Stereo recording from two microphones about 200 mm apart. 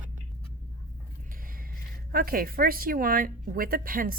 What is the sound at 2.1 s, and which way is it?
Speech, 45° right (ahead or behind).